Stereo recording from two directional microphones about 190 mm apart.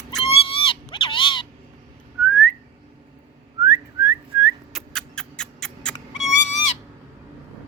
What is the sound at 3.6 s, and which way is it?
Whistling, 15° right (ahead or behind).